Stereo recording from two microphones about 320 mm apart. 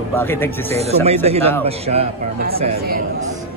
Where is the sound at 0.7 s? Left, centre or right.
Centre.